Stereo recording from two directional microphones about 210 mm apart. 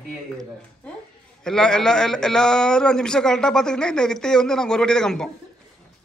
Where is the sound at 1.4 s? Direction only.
5° left (ahead or behind).